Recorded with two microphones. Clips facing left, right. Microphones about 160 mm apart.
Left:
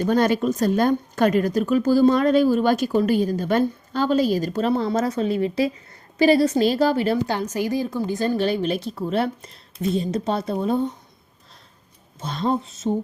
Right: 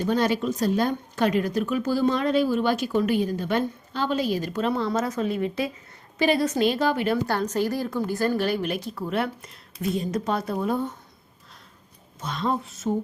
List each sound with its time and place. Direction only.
0.0 s a woman's voice: 45° left (ahead or behind)
7.5 s speech: 15° left (ahead or behind)
12.2 s a woman's voice: 30° left (ahead or behind)